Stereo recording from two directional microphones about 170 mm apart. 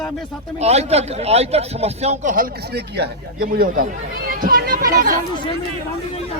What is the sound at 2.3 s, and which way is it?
Speech, 65° right (ahead or behind).